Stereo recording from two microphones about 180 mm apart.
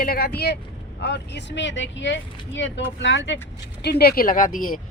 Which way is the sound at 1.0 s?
75° left (ahead or behind).